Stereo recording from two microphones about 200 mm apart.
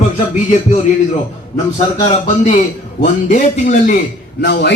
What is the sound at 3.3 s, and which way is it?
Speech, 40° left (ahead or behind).